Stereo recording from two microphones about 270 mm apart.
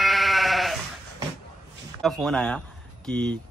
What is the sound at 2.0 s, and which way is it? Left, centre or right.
Speech, centre.